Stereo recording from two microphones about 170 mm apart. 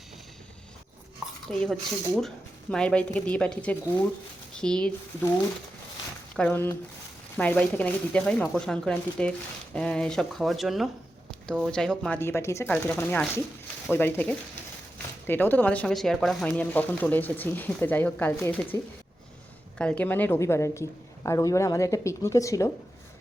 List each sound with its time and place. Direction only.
1.5 s speech: 5° left (ahead or behind)
6.3 s speech: 10° left (ahead or behind)
19.8 s a woman's voice: 5° left (ahead or behind)